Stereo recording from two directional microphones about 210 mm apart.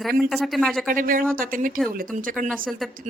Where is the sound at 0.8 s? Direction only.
40° right (ahead or behind).